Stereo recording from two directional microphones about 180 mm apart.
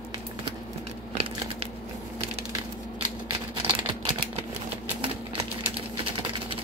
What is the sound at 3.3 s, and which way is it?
Typing, 25° right (ahead or behind).